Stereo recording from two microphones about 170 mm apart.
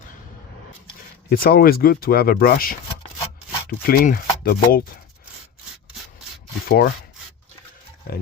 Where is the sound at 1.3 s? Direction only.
60° left (ahead or behind).